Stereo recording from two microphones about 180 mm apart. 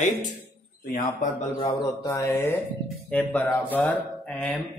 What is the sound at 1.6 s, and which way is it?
Speech, 20° left (ahead or behind).